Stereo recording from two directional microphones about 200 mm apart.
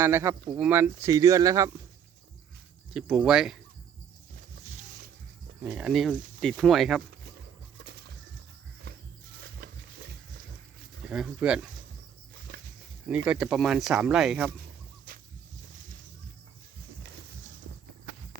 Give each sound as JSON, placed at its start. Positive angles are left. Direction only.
{"t": 0.0, "sound": "speech", "side_deg": -10}
{"t": 2.9, "sound": "speech", "side_deg": 0}
{"t": 5.6, "sound": "speech", "side_deg": -5}
{"t": 9.4, "sound": "pig", "side_deg": -50}
{"t": 11.1, "sound": "speech", "side_deg": -5}
{"t": 12.5, "sound": "a sound", "side_deg": -50}
{"t": 13.2, "sound": "speech", "side_deg": -5}